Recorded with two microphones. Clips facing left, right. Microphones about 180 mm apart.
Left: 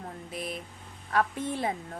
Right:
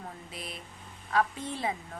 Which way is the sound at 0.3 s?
50° left (ahead or behind).